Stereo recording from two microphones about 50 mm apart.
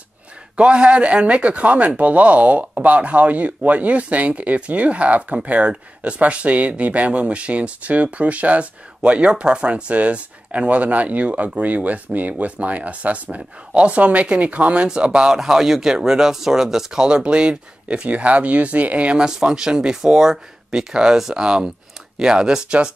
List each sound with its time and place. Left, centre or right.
0.6 s speech: right
15.3 s speech: centre; by 19.1 s right
19.1 s speech: centre